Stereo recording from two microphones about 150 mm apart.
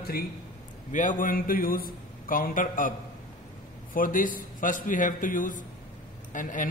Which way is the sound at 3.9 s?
65° left (ahead or behind).